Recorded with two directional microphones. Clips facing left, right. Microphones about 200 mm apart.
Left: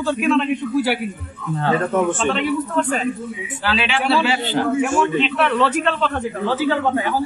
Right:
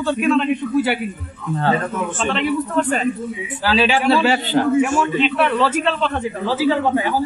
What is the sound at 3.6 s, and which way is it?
Speech, 40° right (ahead or behind).